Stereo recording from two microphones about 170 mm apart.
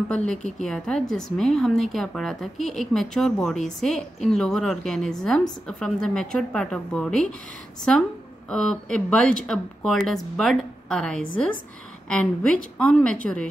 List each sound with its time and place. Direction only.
0.1 s speech: 5° left (ahead or behind)
0.4 s a woman's voice: 45° left (ahead or behind)
0.7 s speech: 5° left (ahead or behind)
8.5 s speech: 5° left (ahead or behind)